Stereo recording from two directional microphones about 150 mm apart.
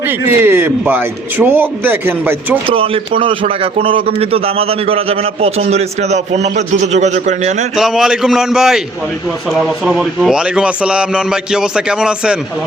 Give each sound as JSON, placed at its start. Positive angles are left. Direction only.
{"t": 0.0, "sound": "a man's voice", "side_deg": -15}
{"t": 2.6, "sound": "a man's voice", "side_deg": -40}
{"t": 7.8, "sound": "a man's voice", "side_deg": -5}